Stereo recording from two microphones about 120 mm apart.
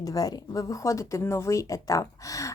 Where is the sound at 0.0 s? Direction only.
30° left (ahead or behind).